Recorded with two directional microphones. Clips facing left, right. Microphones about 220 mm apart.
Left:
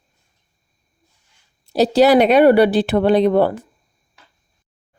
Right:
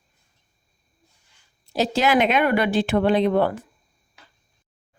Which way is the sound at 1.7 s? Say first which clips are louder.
Left 8 dB; 35° left (ahead or behind).